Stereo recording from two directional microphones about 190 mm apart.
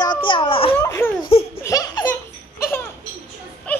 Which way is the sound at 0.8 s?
10° left (ahead or behind).